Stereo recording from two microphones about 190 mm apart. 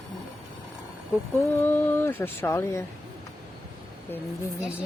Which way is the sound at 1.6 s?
10° left (ahead or behind).